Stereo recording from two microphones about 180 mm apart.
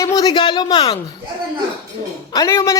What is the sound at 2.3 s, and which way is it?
Speech, 20° left (ahead or behind).